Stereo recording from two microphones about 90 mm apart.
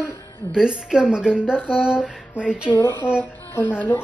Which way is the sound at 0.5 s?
10° right (ahead or behind).